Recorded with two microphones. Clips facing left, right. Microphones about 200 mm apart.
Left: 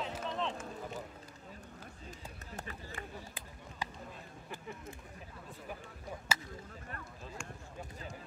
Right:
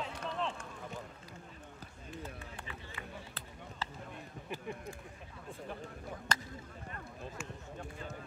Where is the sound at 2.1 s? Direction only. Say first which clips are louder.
Right 4 dB; 45° left (ahead or behind).